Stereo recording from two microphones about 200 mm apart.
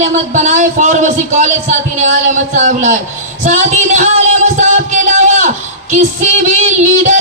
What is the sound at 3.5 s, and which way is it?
Music, 40° right (ahead or behind).